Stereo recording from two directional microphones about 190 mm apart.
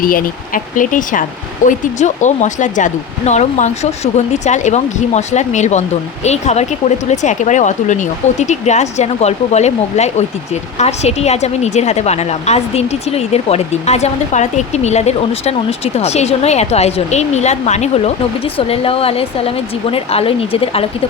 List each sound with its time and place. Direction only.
0.0 s speech: 50° left (ahead or behind); by 20.8 s 30° left (ahead or behind)